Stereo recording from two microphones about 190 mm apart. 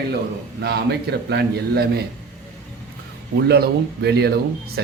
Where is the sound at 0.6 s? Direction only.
60° right (ahead or behind).